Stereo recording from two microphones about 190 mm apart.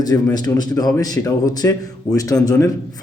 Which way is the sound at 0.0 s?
20° left (ahead or behind).